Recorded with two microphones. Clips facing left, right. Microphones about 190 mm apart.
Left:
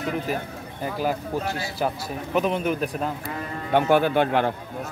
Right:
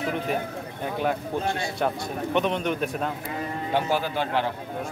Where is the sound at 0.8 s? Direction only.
5° left (ahead or behind).